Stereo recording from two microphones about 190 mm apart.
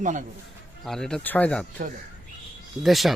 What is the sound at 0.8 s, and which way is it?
Speech, centre (ahead or behind).